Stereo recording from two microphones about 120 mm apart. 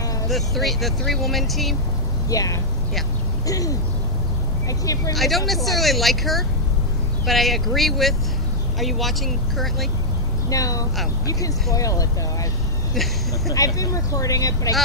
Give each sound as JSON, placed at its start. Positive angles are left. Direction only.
{"t": 0.3, "sound": "speech", "side_deg": 0}
{"t": 2.2, "sound": "speech", "side_deg": 30}
{"t": 5.1, "sound": "speech", "side_deg": 0}
{"t": 10.5, "sound": "speech", "side_deg": 30}
{"t": 13.5, "sound": "speech", "side_deg": 30}